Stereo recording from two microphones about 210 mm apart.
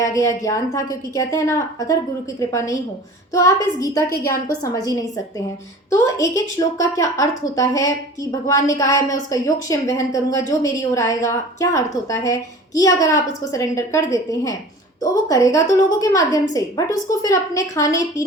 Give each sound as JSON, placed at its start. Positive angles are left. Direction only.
{"t": 0.0, "sound": "a woman's voice", "side_deg": 15}